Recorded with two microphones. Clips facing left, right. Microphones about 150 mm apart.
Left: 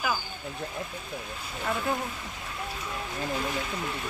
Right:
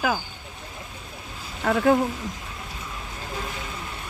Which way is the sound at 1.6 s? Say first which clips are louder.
Right 10 dB; 85° right.